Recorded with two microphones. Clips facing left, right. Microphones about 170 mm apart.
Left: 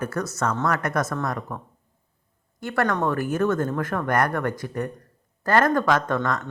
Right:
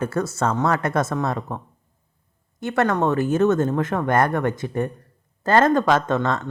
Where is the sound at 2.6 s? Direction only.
20° right (ahead or behind).